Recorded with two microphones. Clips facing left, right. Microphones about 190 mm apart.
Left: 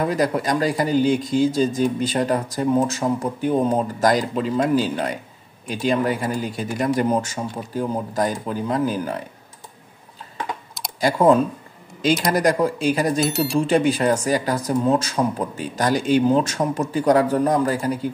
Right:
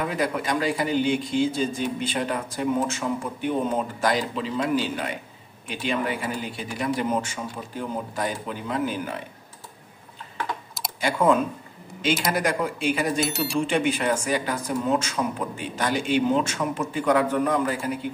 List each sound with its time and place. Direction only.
0.0 s speech: 40° left (ahead or behind)
11.0 s speech: 40° left (ahead or behind)
13.2 s speech: centre (ahead or behind)
13.6 s speech: 35° left (ahead or behind)